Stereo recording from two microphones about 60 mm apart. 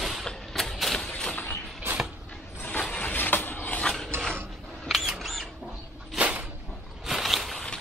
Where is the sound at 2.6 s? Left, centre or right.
Left.